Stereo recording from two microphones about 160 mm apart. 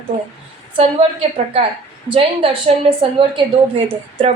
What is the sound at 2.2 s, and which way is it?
A woman's voice, 35° right (ahead or behind).